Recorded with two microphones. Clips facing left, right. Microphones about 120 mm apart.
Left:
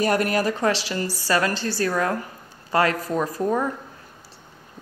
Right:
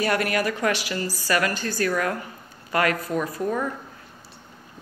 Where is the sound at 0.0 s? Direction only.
40° left (ahead or behind).